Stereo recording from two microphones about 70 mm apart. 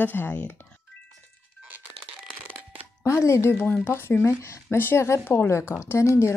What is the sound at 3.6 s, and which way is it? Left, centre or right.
Speech, left.